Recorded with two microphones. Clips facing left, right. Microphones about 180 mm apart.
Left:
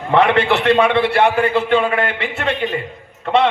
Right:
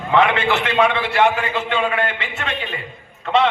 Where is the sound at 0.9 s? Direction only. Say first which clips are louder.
Left 3 dB; 30° left (ahead or behind).